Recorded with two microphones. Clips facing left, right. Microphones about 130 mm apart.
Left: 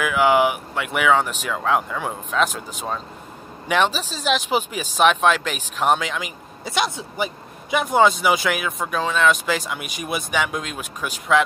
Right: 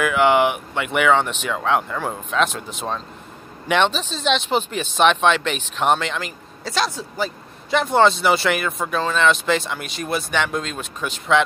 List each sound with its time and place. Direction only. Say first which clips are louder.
0.0 s speech: right 1 dB; 5° left (ahead or behind)
6.6 s speech: even; 20° left (ahead or behind)
7.8 s speech: even; 5° left (ahead or behind)